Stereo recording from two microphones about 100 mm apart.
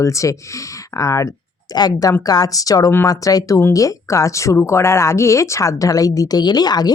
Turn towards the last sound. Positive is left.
turn(degrees=40)  # may be behind; listen again after turning